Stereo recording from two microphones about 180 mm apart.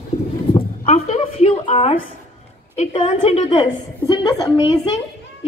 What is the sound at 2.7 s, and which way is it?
A woman's voice, 30° left (ahead or behind).